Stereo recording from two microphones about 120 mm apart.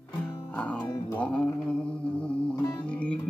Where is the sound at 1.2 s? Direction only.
10° left (ahead or behind).